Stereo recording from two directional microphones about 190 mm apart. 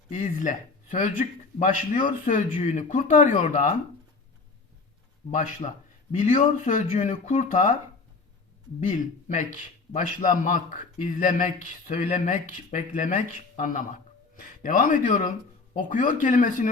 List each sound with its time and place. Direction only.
0.1 s a man's voice: 40° left (ahead or behind)
5.3 s a man's voice: 40° left (ahead or behind)
8.8 s a man's voice: 40° left (ahead or behind)